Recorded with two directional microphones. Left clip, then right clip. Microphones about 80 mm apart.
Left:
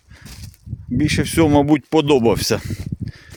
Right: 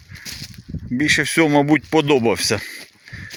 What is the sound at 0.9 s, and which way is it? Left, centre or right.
Speech, left.